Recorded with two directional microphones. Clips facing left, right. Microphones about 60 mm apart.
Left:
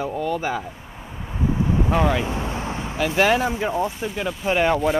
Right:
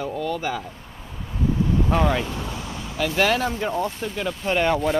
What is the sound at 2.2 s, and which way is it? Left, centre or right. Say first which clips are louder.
Vehicle: left 4 dB; left.